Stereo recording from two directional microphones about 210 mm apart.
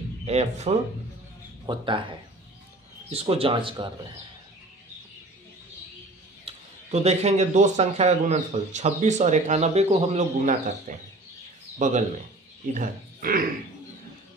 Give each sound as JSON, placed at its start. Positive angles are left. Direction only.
{"t": 0.2, "sound": "speech", "side_deg": -30}
{"t": 6.4, "sound": "speech", "side_deg": -30}
{"t": 12.7, "sound": "speech", "side_deg": -45}